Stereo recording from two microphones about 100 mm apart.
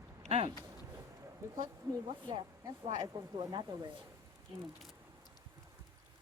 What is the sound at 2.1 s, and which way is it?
Speech, 55° right (ahead or behind).